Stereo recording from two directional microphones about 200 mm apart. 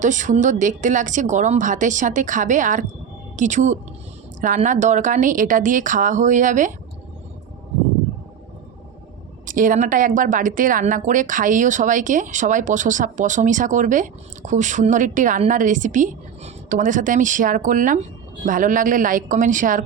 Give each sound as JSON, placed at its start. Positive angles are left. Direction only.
{"t": 0.0, "sound": "a woman's voice", "side_deg": -40}
{"t": 9.5, "sound": "a woman's voice", "side_deg": -40}